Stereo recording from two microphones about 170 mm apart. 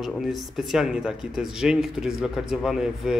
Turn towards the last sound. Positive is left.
turn(degrees=0)  # may be behind; listen again after turning